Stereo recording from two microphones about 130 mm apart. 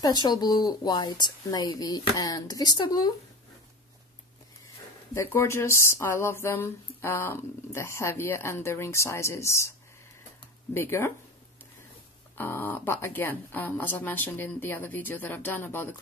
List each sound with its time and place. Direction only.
0.0 s a woman's voice: 30° left (ahead or behind)
5.1 s speech: 20° left (ahead or behind)
10.7 s speech: 20° left (ahead or behind)
12.4 s speech: 15° left (ahead or behind)